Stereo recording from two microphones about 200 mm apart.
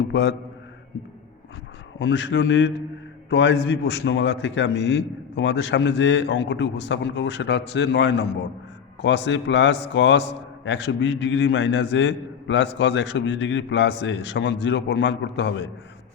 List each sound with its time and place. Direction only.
0.0 s a man's voice: 60° left (ahead or behind)
2.0 s a man's voice: 60° left (ahead or behind)